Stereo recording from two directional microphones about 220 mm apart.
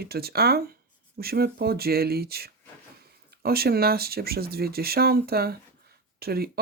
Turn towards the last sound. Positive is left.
turn(degrees=-45)  # may be behind; listen again after turning